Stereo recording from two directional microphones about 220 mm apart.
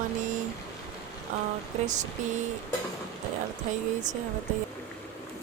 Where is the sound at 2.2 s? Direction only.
35° right (ahead or behind).